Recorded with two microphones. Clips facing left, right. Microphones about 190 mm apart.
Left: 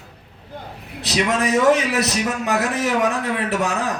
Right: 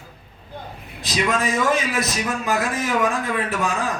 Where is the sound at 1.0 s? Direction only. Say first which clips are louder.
Left 2 dB; 70° left (ahead or behind).